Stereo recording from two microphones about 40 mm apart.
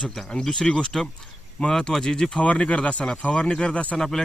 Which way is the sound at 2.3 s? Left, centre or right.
Left.